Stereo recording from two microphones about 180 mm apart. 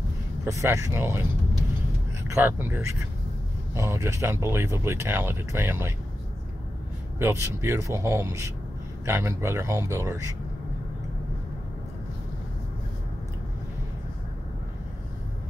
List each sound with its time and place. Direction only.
0.5 s speech: 15° right (ahead or behind)
2.2 s speech: 10° right (ahead or behind)
7.2 s speech: 15° right (ahead or behind)